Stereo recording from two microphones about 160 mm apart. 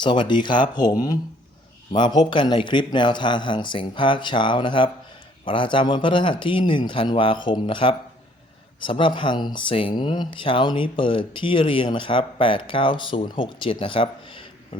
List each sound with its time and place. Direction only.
0.0 s a man's voice: 30° left (ahead or behind)